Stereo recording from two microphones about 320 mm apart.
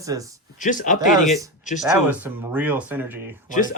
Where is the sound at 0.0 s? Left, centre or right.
Centre.